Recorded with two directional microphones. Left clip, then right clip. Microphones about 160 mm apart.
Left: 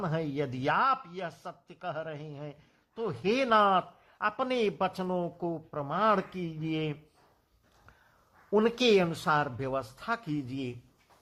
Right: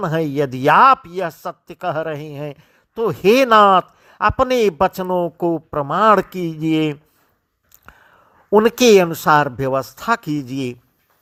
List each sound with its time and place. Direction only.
0.0 s speech: 40° right (ahead or behind)
7.9 s a sound: 45° right (ahead or behind)
8.6 s speech: 40° right (ahead or behind)